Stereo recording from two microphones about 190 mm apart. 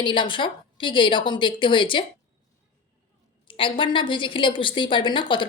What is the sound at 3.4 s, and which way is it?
A woman's voice, 25° left (ahead or behind).